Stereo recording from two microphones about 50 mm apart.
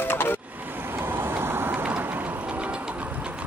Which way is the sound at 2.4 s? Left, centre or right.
Right.